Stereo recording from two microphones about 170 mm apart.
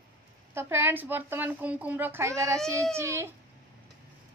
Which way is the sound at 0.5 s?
15° right (ahead or behind).